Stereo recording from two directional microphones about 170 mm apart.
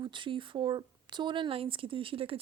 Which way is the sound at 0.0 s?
30° right (ahead or behind).